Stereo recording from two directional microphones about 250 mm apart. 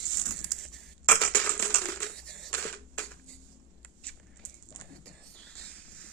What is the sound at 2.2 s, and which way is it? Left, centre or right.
Camera, centre.